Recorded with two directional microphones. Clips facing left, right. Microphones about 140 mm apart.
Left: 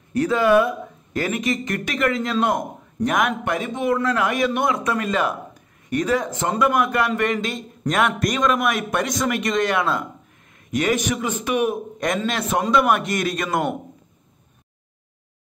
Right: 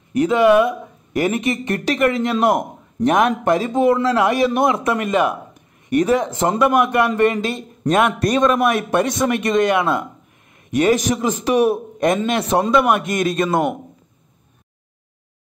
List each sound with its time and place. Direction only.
0.1 s speech: 20° right (ahead or behind)
10.7 s a man's voice: 30° right (ahead or behind)